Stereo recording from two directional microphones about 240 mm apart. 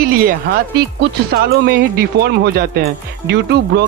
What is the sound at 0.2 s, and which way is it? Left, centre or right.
Speech, right.